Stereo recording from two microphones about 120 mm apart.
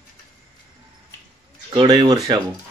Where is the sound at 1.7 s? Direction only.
35° right (ahead or behind).